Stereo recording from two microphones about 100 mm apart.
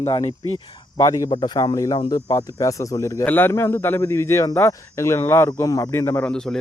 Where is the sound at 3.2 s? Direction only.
20° left (ahead or behind).